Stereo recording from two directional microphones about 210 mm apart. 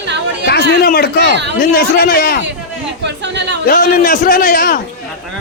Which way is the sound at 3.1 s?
55° right (ahead or behind).